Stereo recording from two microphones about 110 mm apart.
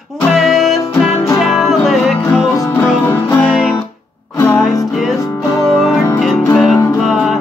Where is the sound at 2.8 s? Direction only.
15° left (ahead or behind).